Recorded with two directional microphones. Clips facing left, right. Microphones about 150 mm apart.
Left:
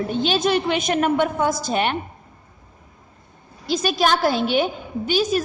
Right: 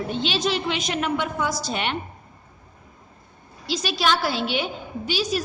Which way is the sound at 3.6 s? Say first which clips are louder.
Left 4 dB; 50° left (ahead or behind).